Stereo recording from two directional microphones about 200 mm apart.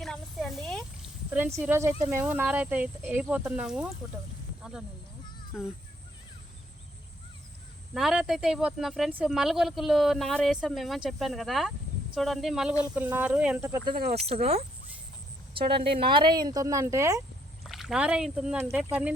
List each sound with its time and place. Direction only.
0.0 s a sound: centre (ahead or behind)
1.3 s speech: 10° right (ahead or behind)
5.5 s speech: centre (ahead or behind)
7.9 s speech: centre (ahead or behind)
14.3 s speech: 30° right (ahead or behind)
16.0 s speech: 25° right (ahead or behind)
17.7 s speech: centre (ahead or behind)